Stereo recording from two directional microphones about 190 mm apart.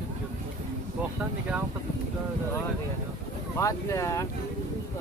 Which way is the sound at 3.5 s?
15° left (ahead or behind).